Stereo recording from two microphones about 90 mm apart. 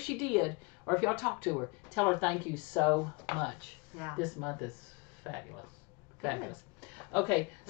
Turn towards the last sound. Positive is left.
turn(degrees=20)  # may be behind; listen again after turning